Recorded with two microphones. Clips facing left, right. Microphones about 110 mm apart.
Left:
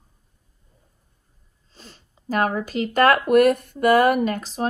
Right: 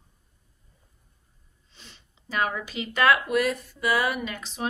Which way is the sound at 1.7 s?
40° left (ahead or behind).